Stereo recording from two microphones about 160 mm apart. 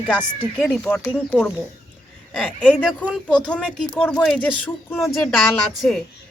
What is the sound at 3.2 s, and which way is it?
Speech, 5° left (ahead or behind).